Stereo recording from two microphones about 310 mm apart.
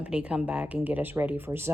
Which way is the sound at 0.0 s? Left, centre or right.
Centre.